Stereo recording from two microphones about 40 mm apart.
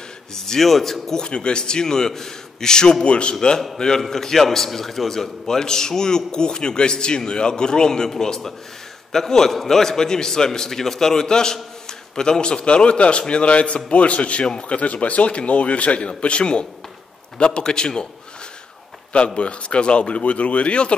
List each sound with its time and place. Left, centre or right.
0.3 s a man's voice: centre
1.2 s a man's voice: left
19.1 s a man's voice: left